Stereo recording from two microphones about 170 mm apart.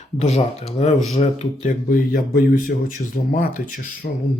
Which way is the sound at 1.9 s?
55° left (ahead or behind).